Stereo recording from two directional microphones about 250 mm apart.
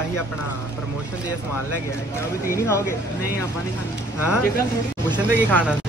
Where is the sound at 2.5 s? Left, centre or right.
Centre.